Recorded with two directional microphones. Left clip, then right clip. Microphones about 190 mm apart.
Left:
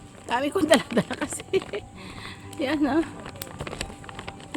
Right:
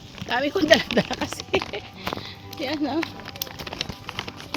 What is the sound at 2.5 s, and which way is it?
Speech, 45° left (ahead or behind).